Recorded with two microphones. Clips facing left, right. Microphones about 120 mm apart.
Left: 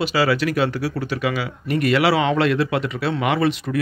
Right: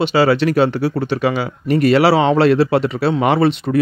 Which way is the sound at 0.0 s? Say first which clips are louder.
Right 5 dB; 30° right (ahead or behind).